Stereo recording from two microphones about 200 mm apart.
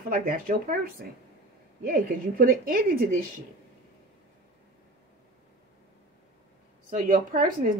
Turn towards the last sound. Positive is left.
turn(degrees=-45)  # may be behind; listen again after turning